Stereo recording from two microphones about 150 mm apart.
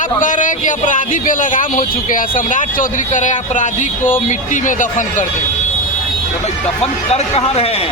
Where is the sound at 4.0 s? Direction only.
15° left (ahead or behind).